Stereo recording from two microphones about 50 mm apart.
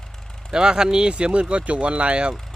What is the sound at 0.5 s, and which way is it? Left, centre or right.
Speech, centre.